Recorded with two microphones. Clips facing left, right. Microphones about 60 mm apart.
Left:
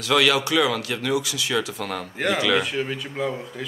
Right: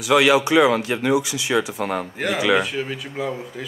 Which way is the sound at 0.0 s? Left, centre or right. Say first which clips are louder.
Right 4 dB; centre.